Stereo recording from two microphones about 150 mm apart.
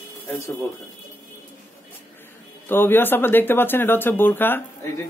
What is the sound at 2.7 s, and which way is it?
A man's voice, 15° left (ahead or behind).